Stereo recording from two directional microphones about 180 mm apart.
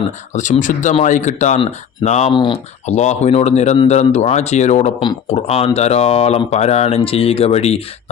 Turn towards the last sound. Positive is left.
turn(degrees=35)  # may be behind; listen again after turning